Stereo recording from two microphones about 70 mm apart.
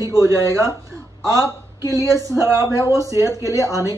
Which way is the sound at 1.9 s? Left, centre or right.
Right.